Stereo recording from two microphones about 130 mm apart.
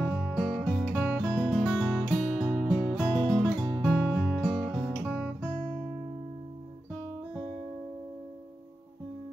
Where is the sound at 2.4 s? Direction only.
10° right (ahead or behind).